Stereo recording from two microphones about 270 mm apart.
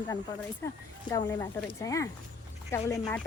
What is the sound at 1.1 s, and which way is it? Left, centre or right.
Speech, centre.